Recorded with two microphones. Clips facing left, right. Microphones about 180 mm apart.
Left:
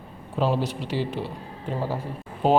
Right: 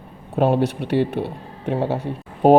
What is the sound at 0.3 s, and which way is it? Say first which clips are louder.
Speech: right 6 dB; 60° right (ahead or behind).